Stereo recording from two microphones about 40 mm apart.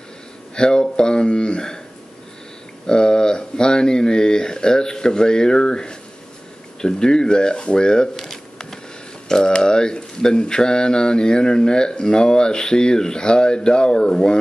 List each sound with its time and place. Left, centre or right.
0.6 s speech: left
2.9 s speech: centre
9.3 s speech: centre